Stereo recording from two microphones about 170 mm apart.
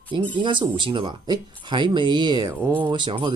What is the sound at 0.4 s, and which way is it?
Speech, 30° right (ahead or behind).